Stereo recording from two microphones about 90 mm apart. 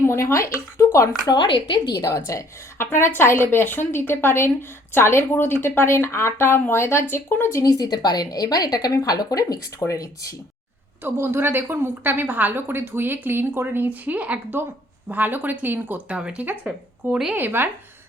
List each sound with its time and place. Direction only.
0.0 s speech: 30° left (ahead or behind)
1.3 s a woman's voice: 60° left (ahead or behind)
1.9 s a woman's voice: 40° left (ahead or behind)
7.6 s a woman's voice: 45° left (ahead or behind)
11.0 s a woman's voice: 25° right (ahead or behind)
16.1 s speech: 10° right (ahead or behind)
17.3 s a woman's voice: 20° right (ahead or behind)